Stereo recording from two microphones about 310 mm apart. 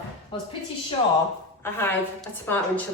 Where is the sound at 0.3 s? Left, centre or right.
Centre.